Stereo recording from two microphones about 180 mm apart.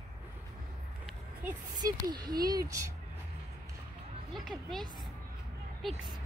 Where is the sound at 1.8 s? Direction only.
20° right (ahead or behind).